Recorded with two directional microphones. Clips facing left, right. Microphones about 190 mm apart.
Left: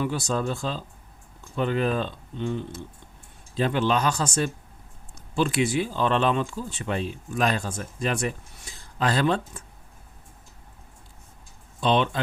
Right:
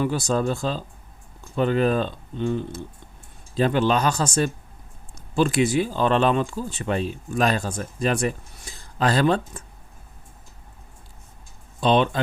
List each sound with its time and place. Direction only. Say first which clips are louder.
0.0 s speech: right 4 dB; 40° right (ahead or behind)
11.8 s speech: right 3 dB; 40° right (ahead or behind)